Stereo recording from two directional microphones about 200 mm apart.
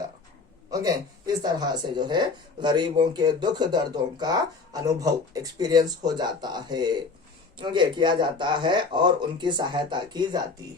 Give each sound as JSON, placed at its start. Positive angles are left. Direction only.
{"t": 0.7, "sound": "speech", "side_deg": -20}